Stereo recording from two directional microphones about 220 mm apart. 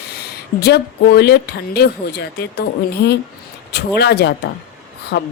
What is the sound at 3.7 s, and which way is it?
Speech, 50° left (ahead or behind).